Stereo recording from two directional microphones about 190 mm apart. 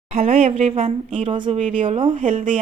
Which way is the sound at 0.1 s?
35° right (ahead or behind).